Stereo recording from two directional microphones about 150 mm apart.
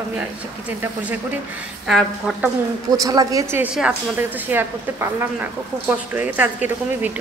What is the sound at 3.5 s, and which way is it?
A woman's voice, 10° right (ahead or behind).